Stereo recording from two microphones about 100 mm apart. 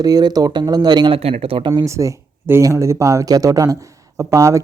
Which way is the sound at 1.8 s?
30° right (ahead or behind).